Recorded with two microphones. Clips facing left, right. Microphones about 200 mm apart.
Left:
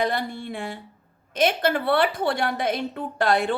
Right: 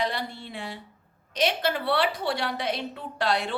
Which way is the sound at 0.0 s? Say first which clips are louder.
Left 4 dB; 50° left (ahead or behind).